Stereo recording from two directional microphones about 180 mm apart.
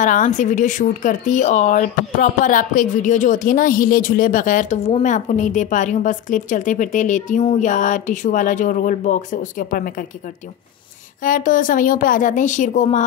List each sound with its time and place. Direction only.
0.0 s speech: 45° left (ahead or behind)
11.2 s speech: 50° left (ahead or behind)